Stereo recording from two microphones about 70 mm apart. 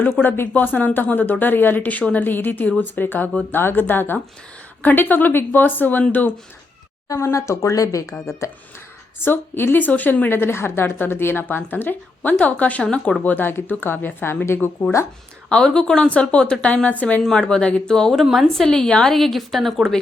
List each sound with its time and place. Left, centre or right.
0.0 s speech: left
7.1 s speech: left
9.2 s a woman's voice: left; by 13.1 s centre
13.2 s a woman's voice: left
15.4 s speech: centre
17.2 s a woman's voice: centre